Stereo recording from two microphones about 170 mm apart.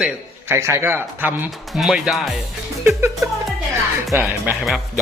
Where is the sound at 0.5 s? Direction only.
15° right (ahead or behind).